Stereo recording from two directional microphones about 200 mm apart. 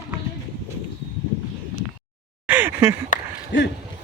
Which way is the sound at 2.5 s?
10° right (ahead or behind).